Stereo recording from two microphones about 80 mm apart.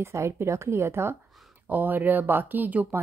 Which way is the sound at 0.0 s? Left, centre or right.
Right.